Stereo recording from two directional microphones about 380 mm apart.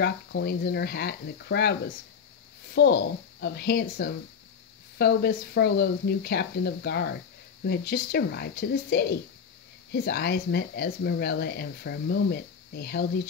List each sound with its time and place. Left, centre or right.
0.0 s speech: left